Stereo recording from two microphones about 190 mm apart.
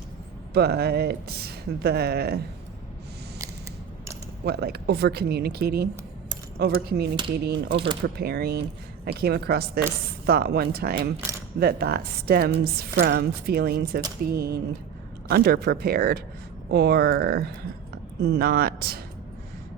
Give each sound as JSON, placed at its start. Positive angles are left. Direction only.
{"t": 0.5, "sound": "a woman's voice", "side_deg": -55}
{"t": 4.4, "sound": "a woman's voice", "side_deg": -55}
{"t": 11.2, "sound": "a sound", "side_deg": -15}
{"t": 11.6, "sound": "a woman's voice", "side_deg": -55}